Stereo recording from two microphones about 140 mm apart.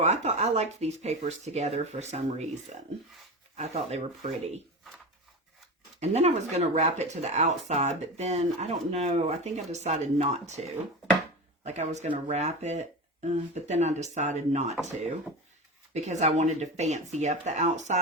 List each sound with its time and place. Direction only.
0.0 s speech: 50° right (ahead or behind)
6.0 s speech: 50° right (ahead or behind)
15.9 s speech: 55° right (ahead or behind)